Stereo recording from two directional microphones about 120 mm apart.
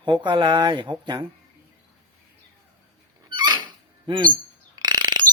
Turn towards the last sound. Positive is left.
turn(degrees=-35)  # may be behind; listen again after turning